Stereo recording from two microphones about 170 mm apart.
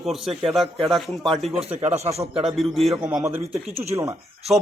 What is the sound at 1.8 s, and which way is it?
Speech, 40° right (ahead or behind).